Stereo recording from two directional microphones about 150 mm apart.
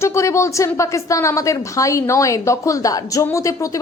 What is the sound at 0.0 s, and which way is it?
A woman's voice, 20° left (ahead or behind).